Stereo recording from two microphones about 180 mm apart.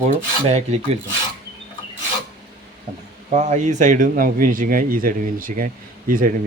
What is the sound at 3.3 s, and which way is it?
A man's voice, 40° right (ahead or behind).